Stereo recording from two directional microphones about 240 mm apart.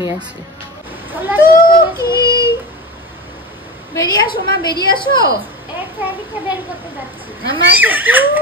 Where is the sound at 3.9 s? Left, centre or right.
Centre.